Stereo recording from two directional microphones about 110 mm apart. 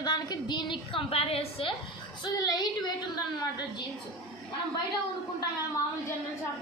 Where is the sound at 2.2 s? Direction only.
40° left (ahead or behind).